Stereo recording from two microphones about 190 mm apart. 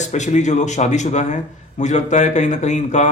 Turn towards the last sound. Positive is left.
turn(degrees=40)  # may be behind; listen again after turning